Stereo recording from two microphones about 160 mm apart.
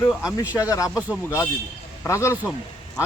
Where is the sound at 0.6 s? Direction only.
20° left (ahead or behind).